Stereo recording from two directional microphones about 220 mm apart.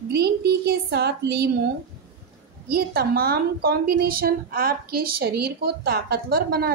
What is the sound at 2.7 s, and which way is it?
A woman's voice, 45° right (ahead or behind).